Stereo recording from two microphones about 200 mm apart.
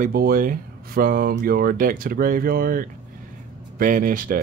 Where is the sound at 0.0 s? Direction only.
45° right (ahead or behind).